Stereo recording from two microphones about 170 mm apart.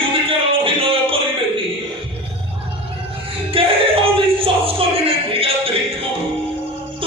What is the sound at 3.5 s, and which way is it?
Music, 35° right (ahead or behind).